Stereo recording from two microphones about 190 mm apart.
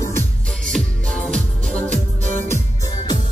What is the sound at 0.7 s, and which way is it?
Music, 5° left (ahead or behind).